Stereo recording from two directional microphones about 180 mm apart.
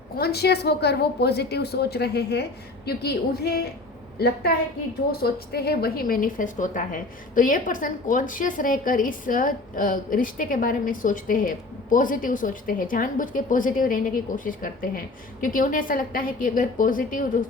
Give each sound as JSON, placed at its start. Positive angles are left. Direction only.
{"t": 0.2, "sound": "a woman's voice", "side_deg": 65}
{"t": 5.1, "sound": "a woman's voice", "side_deg": 60}